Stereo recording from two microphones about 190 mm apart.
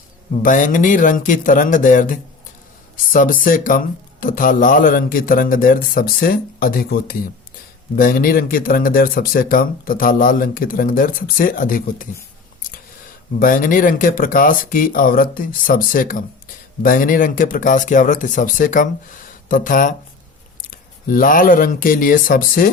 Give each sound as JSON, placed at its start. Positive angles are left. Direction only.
{"t": 0.4, "sound": "speech", "side_deg": 45}
{"t": 13.4, "sound": "speech", "side_deg": 45}